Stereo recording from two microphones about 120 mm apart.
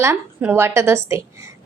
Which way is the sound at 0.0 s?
20° right (ahead or behind).